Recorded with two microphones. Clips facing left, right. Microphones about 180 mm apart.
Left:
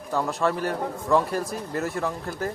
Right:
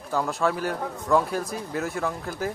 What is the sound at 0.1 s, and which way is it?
Speech, centre (ahead or behind).